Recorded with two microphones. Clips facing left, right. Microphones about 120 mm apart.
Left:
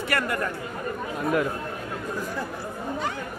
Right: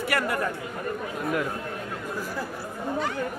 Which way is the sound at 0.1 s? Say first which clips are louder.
Even; 10° right (ahead or behind).